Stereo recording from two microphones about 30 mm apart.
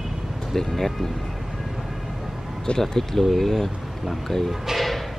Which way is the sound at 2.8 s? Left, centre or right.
Centre.